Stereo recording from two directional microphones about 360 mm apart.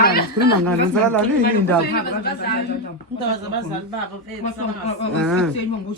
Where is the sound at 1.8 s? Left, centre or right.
Left.